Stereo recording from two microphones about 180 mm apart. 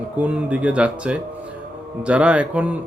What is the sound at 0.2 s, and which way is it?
Speech, 5° right (ahead or behind).